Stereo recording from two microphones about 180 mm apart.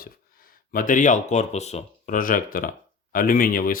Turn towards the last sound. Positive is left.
turn(degrees=50)  # may be behind; listen again after turning